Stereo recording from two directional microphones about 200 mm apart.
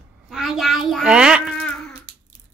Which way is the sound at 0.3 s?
Centre (ahead or behind).